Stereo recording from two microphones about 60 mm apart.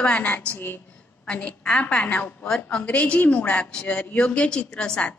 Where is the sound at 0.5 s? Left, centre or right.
Left.